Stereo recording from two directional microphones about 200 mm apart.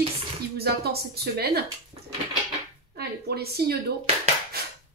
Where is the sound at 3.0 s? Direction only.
50° right (ahead or behind).